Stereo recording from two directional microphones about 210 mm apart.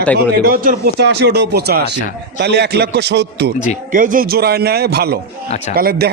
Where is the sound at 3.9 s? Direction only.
40° right (ahead or behind).